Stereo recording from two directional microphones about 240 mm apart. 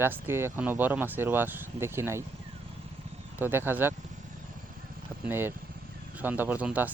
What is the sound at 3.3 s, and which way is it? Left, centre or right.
Speech, centre.